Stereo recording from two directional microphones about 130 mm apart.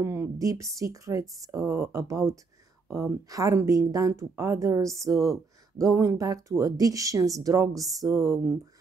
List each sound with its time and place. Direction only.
0.0 s speech: 20° right (ahead or behind)